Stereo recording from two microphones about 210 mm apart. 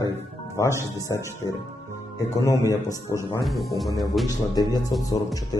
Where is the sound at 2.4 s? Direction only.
15° left (ahead or behind).